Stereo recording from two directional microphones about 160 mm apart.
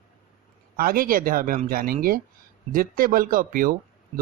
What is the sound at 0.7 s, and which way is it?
Speech, 70° right (ahead or behind).